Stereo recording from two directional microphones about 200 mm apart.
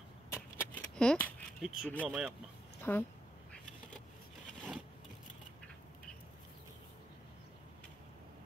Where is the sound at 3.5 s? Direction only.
5° left (ahead or behind).